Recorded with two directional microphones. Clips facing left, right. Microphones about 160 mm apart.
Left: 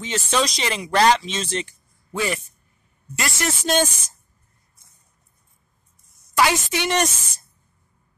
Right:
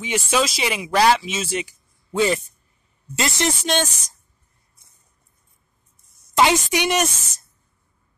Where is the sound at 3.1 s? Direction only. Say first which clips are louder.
Right 3 dB; 20° right (ahead or behind).